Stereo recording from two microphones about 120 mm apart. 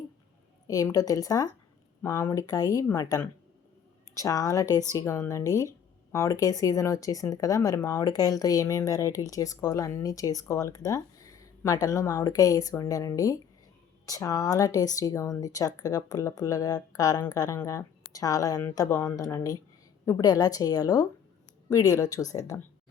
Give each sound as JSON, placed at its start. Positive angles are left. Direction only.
{"t": 0.7, "sound": "a woman's voice", "side_deg": 30}